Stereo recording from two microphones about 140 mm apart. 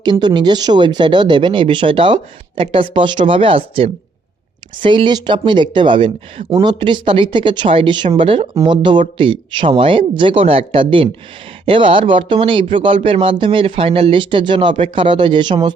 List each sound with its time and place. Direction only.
0.0 s speech: 30° right (ahead or behind)